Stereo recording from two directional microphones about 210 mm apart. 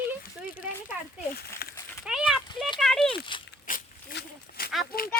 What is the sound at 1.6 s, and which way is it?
Cat, 45° left (ahead or behind).